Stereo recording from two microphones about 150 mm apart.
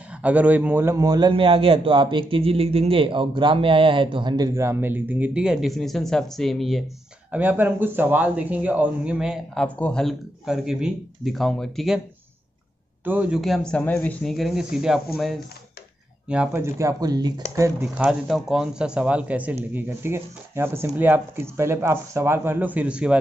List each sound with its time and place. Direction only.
0.2 s a man's voice: 10° right (ahead or behind)
7.2 s a man's voice: 10° right (ahead or behind)
13.0 s speech: 10° right (ahead or behind)
13.4 s a man's voice: 5° left (ahead or behind)
14.3 s a man's voice: centre (ahead or behind)
16.3 s a man's voice: 10° right (ahead or behind)
17.8 s speech: 5° right (ahead or behind)